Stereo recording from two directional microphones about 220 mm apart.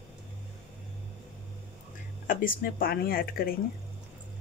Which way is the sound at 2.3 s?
40° left (ahead or behind).